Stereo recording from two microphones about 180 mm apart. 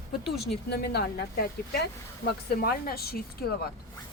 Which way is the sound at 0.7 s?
60° left (ahead or behind).